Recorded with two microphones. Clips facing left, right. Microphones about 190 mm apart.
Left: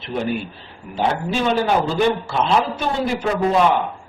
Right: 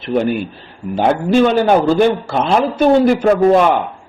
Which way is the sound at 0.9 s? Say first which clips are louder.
Right 8 dB; 55° right (ahead or behind).